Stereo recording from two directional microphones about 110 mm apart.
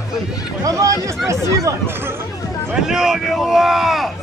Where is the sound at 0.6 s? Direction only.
30° right (ahead or behind).